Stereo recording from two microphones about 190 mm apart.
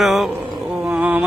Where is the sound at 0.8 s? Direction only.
5° right (ahead or behind).